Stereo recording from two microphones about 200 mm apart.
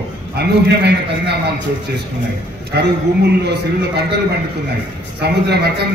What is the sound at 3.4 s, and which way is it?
Speech, 55° right (ahead or behind).